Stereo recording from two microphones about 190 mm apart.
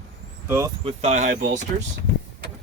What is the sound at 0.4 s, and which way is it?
Speech, 15° right (ahead or behind).